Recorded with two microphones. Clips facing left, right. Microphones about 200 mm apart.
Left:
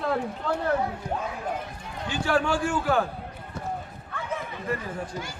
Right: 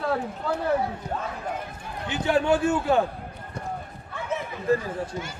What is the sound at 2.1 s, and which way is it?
Speech, 20° right (ahead or behind).